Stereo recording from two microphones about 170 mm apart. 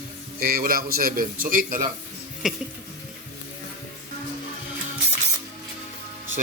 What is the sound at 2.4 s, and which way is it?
Music, 5° right (ahead or behind).